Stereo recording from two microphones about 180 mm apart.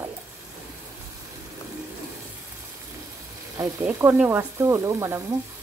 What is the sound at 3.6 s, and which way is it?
Speech, 15° right (ahead or behind).